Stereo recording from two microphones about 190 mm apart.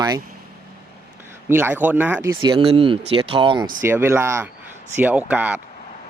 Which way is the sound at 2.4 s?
25° right (ahead or behind).